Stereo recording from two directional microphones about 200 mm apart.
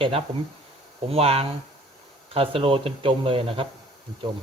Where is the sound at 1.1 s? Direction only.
30° right (ahead or behind).